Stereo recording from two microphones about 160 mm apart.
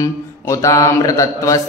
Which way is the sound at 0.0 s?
20° left (ahead or behind).